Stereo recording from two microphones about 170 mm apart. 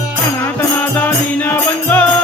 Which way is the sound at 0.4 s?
10° left (ahead or behind).